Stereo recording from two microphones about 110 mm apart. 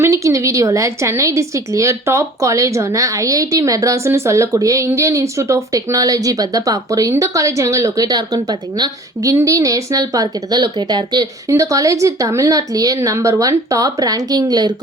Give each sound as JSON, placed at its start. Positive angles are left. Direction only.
{"t": 0.0, "sound": "a woman's voice", "side_deg": -25}
{"t": 11.4, "sound": "a woman's voice", "side_deg": -30}